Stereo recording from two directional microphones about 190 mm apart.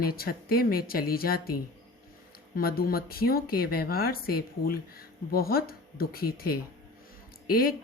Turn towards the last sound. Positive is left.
turn(degrees=50)  # may be behind; listen again after turning